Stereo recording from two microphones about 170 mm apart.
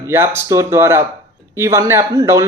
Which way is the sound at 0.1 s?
15° right (ahead or behind).